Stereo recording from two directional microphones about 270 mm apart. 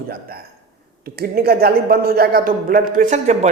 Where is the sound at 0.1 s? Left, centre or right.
Right.